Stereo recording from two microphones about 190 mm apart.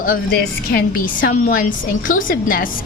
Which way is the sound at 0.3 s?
60° left (ahead or behind).